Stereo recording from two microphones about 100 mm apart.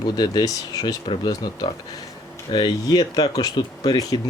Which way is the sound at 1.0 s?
50° left (ahead or behind).